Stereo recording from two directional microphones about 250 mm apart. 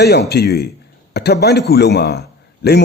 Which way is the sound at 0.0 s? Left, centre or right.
Left.